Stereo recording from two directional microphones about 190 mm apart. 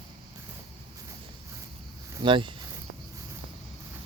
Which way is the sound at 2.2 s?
25° right (ahead or behind).